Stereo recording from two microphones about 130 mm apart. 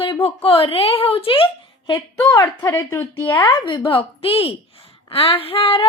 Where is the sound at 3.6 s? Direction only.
40° left (ahead or behind).